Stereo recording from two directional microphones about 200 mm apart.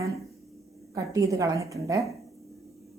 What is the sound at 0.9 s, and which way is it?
A woman's voice, 15° right (ahead or behind).